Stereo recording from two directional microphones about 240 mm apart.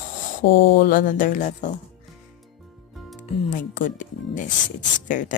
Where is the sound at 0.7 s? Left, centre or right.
Left.